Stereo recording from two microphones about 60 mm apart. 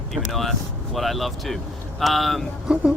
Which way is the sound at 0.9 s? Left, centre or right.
Centre.